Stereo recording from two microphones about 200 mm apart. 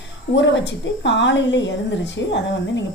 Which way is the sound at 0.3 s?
65° left (ahead or behind).